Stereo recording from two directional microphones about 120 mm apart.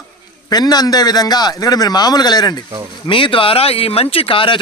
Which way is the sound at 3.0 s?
45° left (ahead or behind).